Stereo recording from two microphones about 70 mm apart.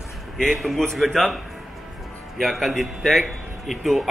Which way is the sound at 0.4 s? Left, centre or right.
Centre.